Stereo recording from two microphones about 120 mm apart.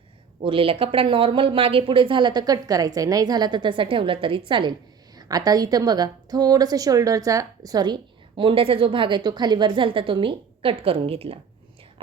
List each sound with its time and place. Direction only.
0.4 s speech: 50° right (ahead or behind)
5.1 s a woman's voice: 30° right (ahead or behind); by 11.3 s 55° right (ahead or behind)